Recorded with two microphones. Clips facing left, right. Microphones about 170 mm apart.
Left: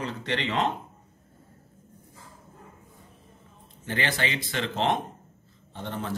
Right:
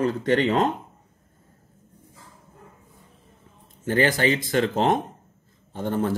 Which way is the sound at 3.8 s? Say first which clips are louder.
Right 9 dB; 45° right (ahead or behind).